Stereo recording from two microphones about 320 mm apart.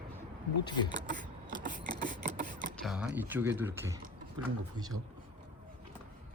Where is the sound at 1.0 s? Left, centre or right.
Right.